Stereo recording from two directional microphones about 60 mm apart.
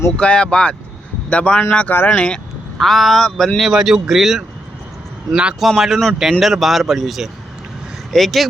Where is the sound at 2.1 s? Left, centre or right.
Centre.